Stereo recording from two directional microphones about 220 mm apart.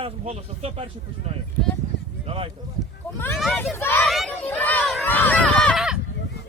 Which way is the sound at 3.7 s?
10° left (ahead or behind).